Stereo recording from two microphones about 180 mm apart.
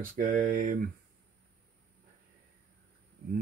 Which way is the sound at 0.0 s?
45° right (ahead or behind).